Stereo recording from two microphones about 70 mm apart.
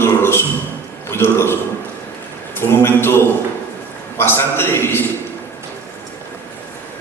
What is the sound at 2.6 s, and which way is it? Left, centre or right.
A man's voice, left.